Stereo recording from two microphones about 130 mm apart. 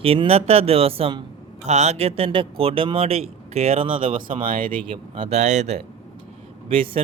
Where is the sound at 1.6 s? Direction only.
60° right (ahead or behind).